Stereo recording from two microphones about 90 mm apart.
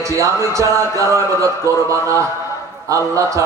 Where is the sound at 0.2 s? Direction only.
35° right (ahead or behind).